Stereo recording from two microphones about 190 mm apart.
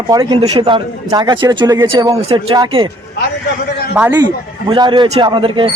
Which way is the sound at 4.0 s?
10° right (ahead or behind).